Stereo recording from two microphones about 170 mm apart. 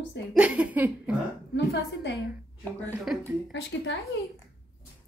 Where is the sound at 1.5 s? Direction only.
90° left.